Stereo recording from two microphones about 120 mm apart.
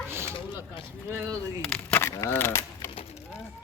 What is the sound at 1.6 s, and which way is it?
Speech, 10° left (ahead or behind).